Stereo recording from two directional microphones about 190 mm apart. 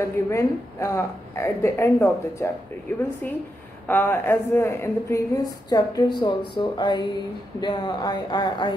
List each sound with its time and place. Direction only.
0.3 s a woman's voice: 15° left (ahead or behind)
3.8 s a woman's voice: 10° left (ahead or behind)